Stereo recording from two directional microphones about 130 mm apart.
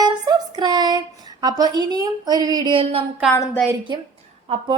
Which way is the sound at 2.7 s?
50° right (ahead or behind).